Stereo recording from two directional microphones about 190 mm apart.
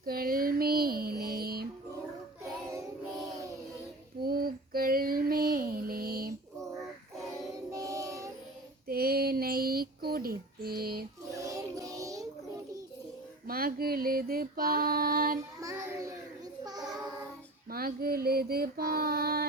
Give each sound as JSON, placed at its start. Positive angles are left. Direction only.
{"t": 0.0, "sound": "child singing", "side_deg": -50}
{"t": 4.2, "sound": "child singing", "side_deg": -50}
{"t": 7.7, "sound": "music", "side_deg": -15}
{"t": 8.9, "sound": "child singing", "side_deg": -50}
{"t": 11.3, "sound": "music", "side_deg": -15}
{"t": 13.5, "sound": "female singing", "side_deg": -50}
{"t": 17.7, "sound": "female singing", "side_deg": -50}